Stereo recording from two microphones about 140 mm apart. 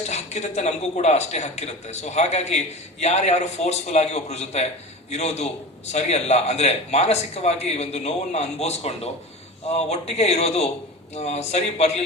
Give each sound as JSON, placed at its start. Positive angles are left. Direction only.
{"t": 0.0, "sound": "a man's voice", "side_deg": 50}